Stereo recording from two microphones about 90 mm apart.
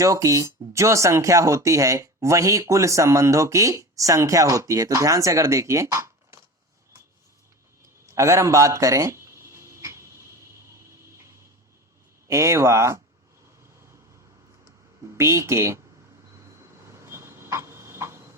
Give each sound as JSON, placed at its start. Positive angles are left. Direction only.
{"t": 0.0, "sound": "speech", "side_deg": -35}
{"t": 7.8, "sound": "a sound", "side_deg": -35}
{"t": 12.3, "sound": "speech", "side_deg": -35}
{"t": 15.0, "sound": "speech", "side_deg": -30}
{"t": 16.4, "sound": "vehicle", "side_deg": -30}